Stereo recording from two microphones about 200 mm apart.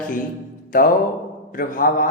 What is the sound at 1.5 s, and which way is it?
Speech, 45° left (ahead or behind).